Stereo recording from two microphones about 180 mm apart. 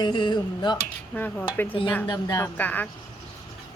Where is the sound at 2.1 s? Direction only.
20° left (ahead or behind).